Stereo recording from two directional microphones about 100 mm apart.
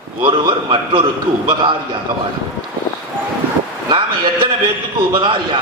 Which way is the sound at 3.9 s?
60° right (ahead or behind).